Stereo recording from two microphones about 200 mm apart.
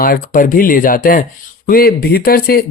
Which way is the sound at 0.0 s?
45° left (ahead or behind).